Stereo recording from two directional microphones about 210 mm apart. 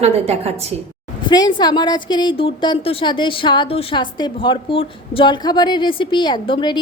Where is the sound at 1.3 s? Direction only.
20° left (ahead or behind).